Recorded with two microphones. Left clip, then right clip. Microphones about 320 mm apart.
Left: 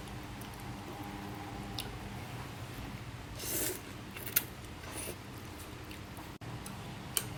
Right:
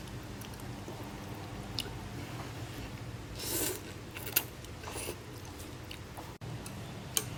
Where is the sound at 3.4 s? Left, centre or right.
Centre.